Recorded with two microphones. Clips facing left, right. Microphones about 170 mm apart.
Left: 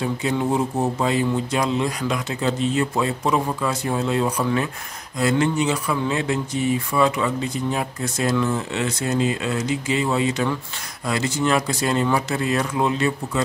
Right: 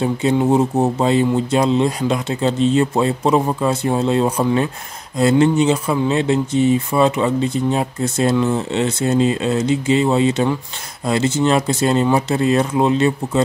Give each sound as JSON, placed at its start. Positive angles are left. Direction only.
{"t": 0.0, "sound": "speech", "side_deg": -25}